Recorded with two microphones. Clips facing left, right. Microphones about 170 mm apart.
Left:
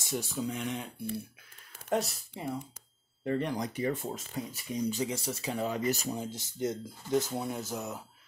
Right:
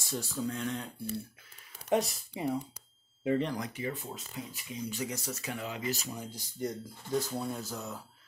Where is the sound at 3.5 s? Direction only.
35° left (ahead or behind).